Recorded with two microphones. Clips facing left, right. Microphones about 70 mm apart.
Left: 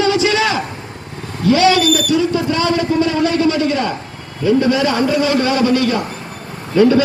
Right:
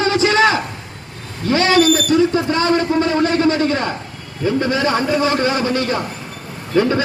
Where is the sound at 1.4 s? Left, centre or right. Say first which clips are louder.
Left 2 dB; right.